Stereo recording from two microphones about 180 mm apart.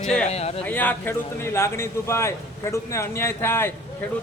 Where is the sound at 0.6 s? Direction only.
10° left (ahead or behind).